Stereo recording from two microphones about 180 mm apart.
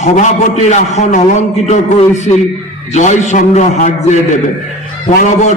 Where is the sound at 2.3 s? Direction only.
35° left (ahead or behind).